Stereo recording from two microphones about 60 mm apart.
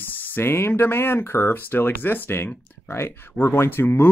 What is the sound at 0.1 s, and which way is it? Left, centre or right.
Speech, left.